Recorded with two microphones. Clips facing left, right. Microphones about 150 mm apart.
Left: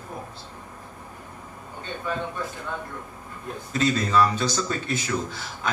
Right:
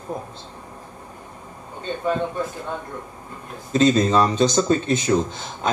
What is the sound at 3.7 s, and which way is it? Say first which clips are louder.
A man's voice: right 6 dB; 20° right (ahead or behind).